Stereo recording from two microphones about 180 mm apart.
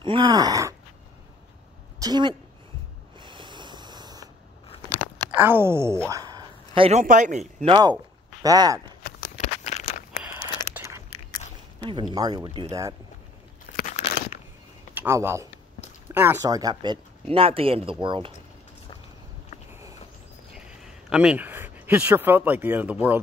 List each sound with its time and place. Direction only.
0.0 s speech: 25° right (ahead or behind)
2.0 s a woman's voice: 25° right (ahead or behind)
3.2 s snort: 25° right (ahead or behind)
5.3 s speech: 10° right (ahead or behind); by 7.0 s 30° right (ahead or behind)
7.0 s speech: 45° right (ahead or behind)
7.7 s speech: 25° right (ahead or behind)
9.4 s a sound: 40° left (ahead or behind)
10.7 s a sound: 15° right (ahead or behind)
11.8 s speech: 25° right (ahead or behind)
12.4 s speech: 35° right (ahead or behind)
13.7 s crunch: 40° left (ahead or behind)
15.0 s speech: 15° right (ahead or behind)
20.5 s speech: 5° right (ahead or behind)